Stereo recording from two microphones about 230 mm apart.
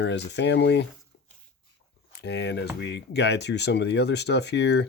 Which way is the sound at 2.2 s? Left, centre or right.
Left.